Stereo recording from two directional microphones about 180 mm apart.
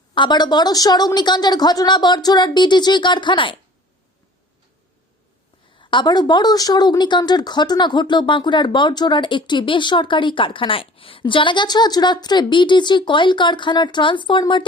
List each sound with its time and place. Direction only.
0.1 s speech: 25° left (ahead or behind)
5.8 s speech: 25° left (ahead or behind)